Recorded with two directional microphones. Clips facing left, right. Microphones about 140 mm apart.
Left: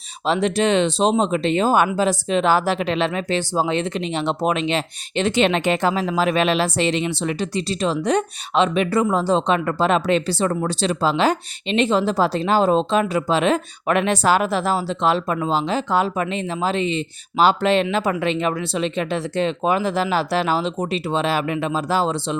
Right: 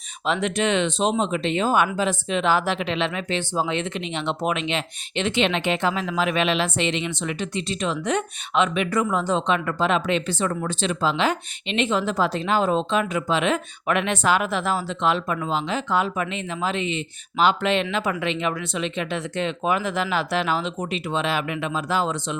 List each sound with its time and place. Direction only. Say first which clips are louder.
0.3 s speech: left 4 dB; 35° left (ahead or behind)